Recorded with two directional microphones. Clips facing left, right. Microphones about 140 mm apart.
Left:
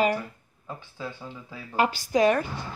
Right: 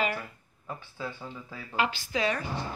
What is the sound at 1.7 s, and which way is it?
Speech, 40° left (ahead or behind).